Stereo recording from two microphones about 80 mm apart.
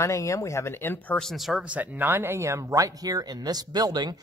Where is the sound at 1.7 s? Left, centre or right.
Right.